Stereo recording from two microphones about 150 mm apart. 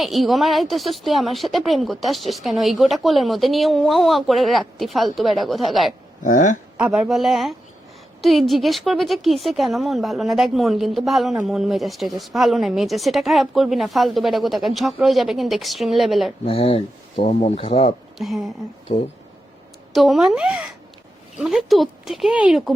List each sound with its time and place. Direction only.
0.0 s speech: centre (ahead or behind)
6.2 s speech: 60° left (ahead or behind)
6.7 s speech: 10° right (ahead or behind)
16.5 s speech: 40° left (ahead or behind)
18.2 s speech: centre (ahead or behind)
18.9 s speech: 40° left (ahead or behind)
19.9 s speech: centre (ahead or behind)